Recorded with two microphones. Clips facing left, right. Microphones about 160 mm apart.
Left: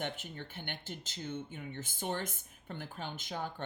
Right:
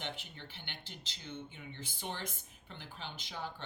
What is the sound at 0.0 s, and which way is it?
Speech, 50° left (ahead or behind).